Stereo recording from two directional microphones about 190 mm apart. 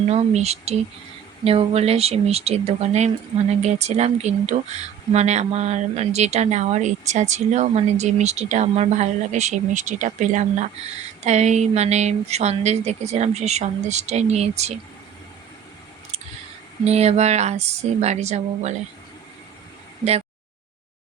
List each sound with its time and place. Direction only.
0.1 s speech: 35° right (ahead or behind)
16.8 s speech: 35° right (ahead or behind)